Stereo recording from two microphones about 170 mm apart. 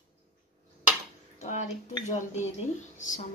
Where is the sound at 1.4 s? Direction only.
45° left (ahead or behind).